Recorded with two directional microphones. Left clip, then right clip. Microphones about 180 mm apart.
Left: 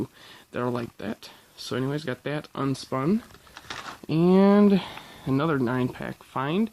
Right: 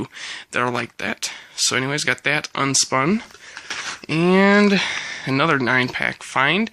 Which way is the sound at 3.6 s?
10° right (ahead or behind).